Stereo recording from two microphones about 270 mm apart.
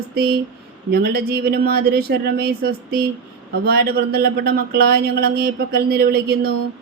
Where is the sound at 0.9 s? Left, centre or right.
Right.